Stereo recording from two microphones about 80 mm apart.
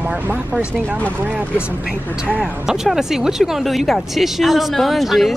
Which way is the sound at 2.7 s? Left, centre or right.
Centre.